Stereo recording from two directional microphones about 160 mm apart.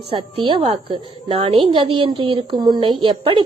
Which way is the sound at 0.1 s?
35° right (ahead or behind).